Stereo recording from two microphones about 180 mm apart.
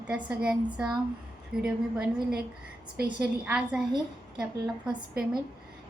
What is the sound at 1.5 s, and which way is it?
Speech, 5° right (ahead or behind).